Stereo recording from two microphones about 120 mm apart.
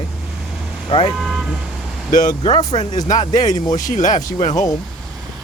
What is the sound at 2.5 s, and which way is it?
Speech, 35° left (ahead or behind).